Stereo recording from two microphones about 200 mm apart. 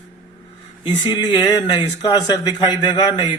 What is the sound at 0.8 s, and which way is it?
Speech, 25° left (ahead or behind).